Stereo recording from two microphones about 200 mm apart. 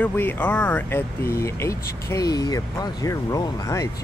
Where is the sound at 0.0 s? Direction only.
10° left (ahead or behind).